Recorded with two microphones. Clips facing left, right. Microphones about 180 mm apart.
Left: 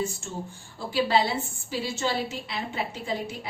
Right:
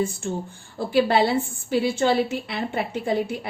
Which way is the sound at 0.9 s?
60° right (ahead or behind).